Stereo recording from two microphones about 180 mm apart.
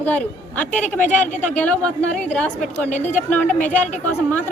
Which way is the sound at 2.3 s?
5° left (ahead or behind).